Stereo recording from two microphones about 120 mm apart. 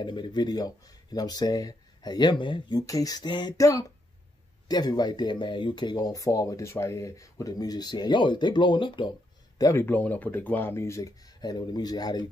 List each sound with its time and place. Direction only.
0.0 s speech: 40° left (ahead or behind)
2.9 s speech: 30° left (ahead or behind)
3.5 s speech: 25° left (ahead or behind); by 9.1 s 45° left (ahead or behind)
9.6 s speech: 25° left (ahead or behind)